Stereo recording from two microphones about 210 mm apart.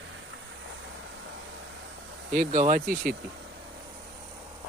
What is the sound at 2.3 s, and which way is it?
Speech, 40° right (ahead or behind).